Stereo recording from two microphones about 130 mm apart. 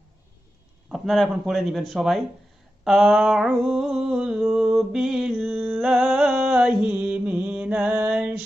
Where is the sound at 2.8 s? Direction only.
Centre (ahead or behind).